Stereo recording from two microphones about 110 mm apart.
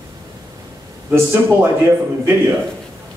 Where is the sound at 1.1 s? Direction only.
25° right (ahead or behind).